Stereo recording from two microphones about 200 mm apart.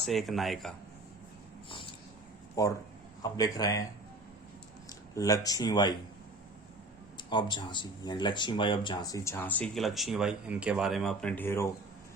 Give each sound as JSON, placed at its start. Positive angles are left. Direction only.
{"t": 0.0, "sound": "speech", "side_deg": 0}
{"t": 1.7, "sound": "a sound", "side_deg": 25}
{"t": 2.6, "sound": "speech", "side_deg": 15}
{"t": 4.9, "sound": "speech", "side_deg": 15}
{"t": 7.2, "sound": "speech", "side_deg": 25}